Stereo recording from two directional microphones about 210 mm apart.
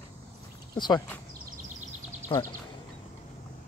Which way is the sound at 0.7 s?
20° left (ahead or behind).